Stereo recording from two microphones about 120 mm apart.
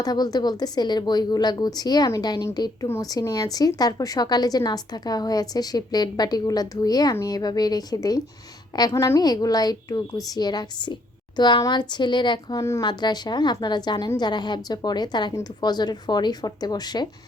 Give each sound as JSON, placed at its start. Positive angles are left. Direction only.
{"t": 0.0, "sound": "a woman's voice", "side_deg": 35}
{"t": 12.5, "sound": "a woman's voice", "side_deg": 25}
{"t": 12.8, "sound": "a woman's voice", "side_deg": 40}